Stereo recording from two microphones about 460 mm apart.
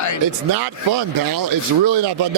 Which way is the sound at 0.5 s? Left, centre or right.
Right.